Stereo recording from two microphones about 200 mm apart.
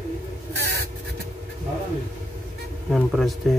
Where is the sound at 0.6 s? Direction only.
55° right (ahead or behind).